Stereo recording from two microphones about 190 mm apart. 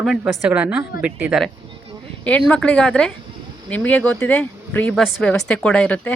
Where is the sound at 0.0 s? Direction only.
Centre (ahead or behind).